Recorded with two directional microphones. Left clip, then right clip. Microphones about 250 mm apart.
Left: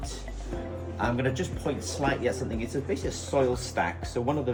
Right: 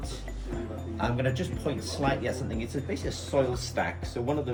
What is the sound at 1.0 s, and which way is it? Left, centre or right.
Speech, centre.